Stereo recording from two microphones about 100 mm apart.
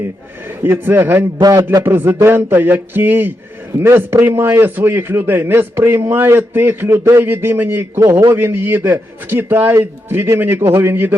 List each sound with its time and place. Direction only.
0.6 s a man's voice: 25° right (ahead or behind)
1.4 s a man's voice: 40° right (ahead or behind)
1.8 s a man's voice: 20° right (ahead or behind)